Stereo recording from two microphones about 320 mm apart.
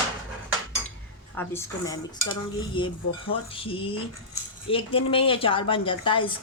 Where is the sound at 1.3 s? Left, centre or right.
Centre.